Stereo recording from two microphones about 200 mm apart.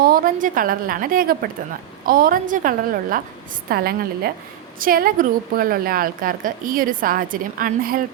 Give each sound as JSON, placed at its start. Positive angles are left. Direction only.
{"t": 0.0, "sound": "a woman's voice", "side_deg": -45}